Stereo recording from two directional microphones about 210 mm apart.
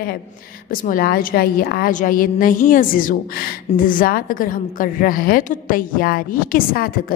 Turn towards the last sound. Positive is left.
turn(degrees=45)  # may be behind; listen again after turning